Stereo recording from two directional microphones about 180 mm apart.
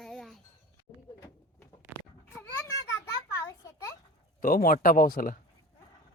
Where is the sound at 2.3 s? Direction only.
10° left (ahead or behind).